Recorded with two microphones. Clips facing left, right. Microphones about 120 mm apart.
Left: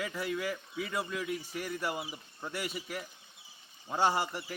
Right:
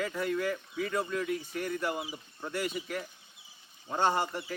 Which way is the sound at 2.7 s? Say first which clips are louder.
Right 4 dB; 5° left (ahead or behind).